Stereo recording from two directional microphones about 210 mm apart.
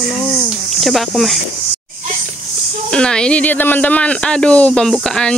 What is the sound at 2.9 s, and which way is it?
Speech, 5° left (ahead or behind).